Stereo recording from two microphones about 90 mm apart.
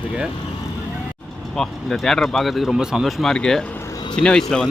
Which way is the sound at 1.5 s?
5° left (ahead or behind).